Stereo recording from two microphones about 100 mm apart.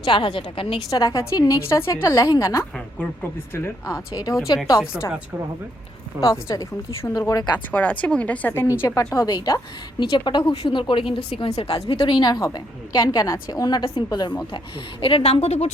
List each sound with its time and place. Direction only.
0.0 s a woman's voice: 50° left (ahead or behind)
0.9 s a woman's voice: 35° left (ahead or behind)
4.8 s a woman's voice: 25° left (ahead or behind)
6.1 s a woman's voice: 35° left (ahead or behind)
7.7 s speech: 15° left (ahead or behind)
8.6 s a woman's voice: 25° left (ahead or behind)
9.1 s a woman's voice: 40° left (ahead or behind)
10.5 s a woman's voice: 65° left (ahead or behind)
11.4 s a woman's voice: 75° left (ahead or behind)
12.0 s a woman's voice: 45° left (ahead or behind)
15.0 s a woman's voice: 75° left (ahead or behind)